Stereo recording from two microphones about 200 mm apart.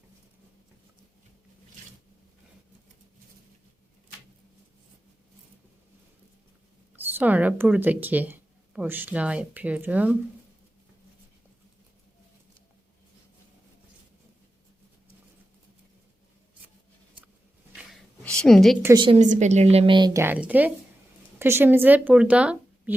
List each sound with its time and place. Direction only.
6.9 s speech: 10° right (ahead or behind)
18.2 s a sound: 5° left (ahead or behind)
18.8 s a woman's voice: 15° right (ahead or behind)
19.0 s a woman's voice: 35° right (ahead or behind); by 23.0 s 5° right (ahead or behind)